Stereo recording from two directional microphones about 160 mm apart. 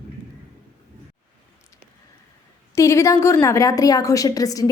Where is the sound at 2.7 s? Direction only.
15° left (ahead or behind).